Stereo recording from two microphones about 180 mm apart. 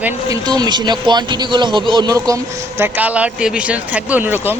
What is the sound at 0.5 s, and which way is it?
A man's voice, 25° right (ahead or behind).